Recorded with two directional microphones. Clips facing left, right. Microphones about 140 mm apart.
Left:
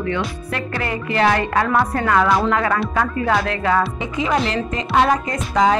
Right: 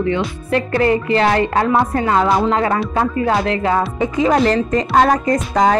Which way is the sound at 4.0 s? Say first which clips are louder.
Right 6 dB; 40° right (ahead or behind).